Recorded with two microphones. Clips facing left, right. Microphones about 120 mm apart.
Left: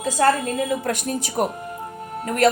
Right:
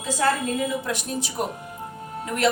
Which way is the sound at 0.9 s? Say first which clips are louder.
Left 4 dB; 50° left (ahead or behind).